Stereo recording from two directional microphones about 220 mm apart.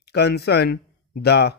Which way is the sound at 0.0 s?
50° left (ahead or behind).